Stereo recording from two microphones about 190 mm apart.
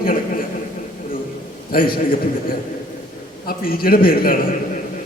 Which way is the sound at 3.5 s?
50° left (ahead or behind).